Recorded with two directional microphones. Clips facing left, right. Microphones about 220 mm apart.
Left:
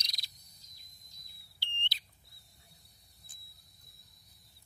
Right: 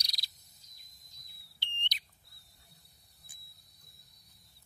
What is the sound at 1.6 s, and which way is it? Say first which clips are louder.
Bird: even; 20° right (ahead or behind).